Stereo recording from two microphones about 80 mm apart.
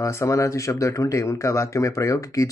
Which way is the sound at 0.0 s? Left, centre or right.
Left.